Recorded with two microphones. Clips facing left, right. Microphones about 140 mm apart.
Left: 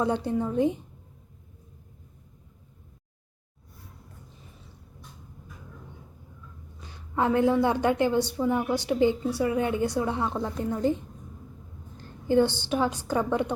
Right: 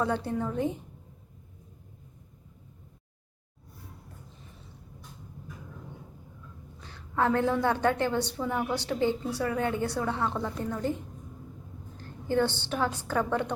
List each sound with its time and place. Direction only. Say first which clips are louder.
0.0 s a woman's voice: left 3 dB; 15° left (ahead or behind)
6.8 s a woman's voice: left 1 dB; 15° left (ahead or behind)
12.3 s a woman's voice: left 5 dB; 15° left (ahead or behind)